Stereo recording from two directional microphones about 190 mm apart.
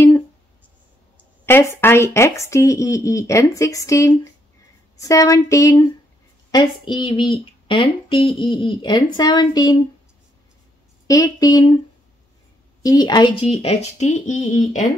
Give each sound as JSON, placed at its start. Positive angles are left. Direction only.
{"t": 1.4, "sound": "speech", "side_deg": 15}
{"t": 11.1, "sound": "speech", "side_deg": 20}
{"t": 12.8, "sound": "speech", "side_deg": 20}